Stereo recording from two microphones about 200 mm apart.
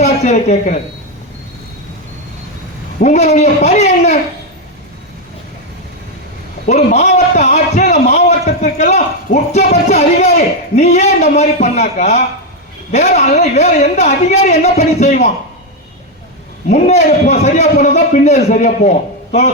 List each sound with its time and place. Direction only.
0.0 s a woman's voice: 35° left (ahead or behind)
3.0 s a man's voice: 35° left (ahead or behind)
6.7 s a sound: 35° left (ahead or behind)
8.6 s a man's voice: 35° left (ahead or behind)
16.6 s a man's voice: 35° left (ahead or behind)